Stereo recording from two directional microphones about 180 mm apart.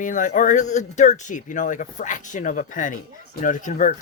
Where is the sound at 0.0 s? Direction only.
45° left (ahead or behind).